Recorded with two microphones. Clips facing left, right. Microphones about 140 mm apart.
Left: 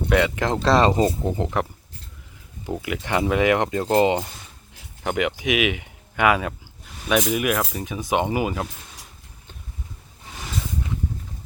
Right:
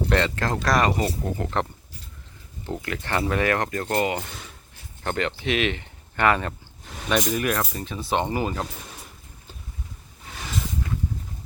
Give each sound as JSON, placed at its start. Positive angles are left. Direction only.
{"t": 0.1, "sound": "speech", "side_deg": 10}
{"t": 2.6, "sound": "speech", "side_deg": 10}
{"t": 5.0, "sound": "speech", "side_deg": 10}